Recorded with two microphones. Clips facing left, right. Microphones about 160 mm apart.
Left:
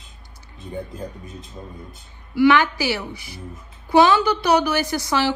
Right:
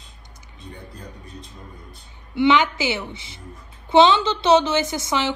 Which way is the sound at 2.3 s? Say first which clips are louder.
Left 2 dB; 20° right (ahead or behind).